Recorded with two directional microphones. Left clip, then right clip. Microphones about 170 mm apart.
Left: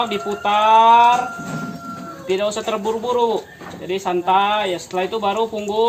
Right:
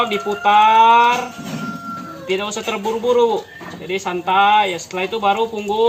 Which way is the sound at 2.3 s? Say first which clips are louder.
Left 1 dB; 70° left (ahead or behind).